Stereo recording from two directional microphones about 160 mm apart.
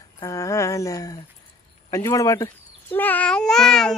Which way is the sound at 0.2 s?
20° left (ahead or behind).